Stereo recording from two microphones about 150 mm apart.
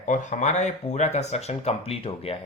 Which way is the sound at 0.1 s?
55° left (ahead or behind).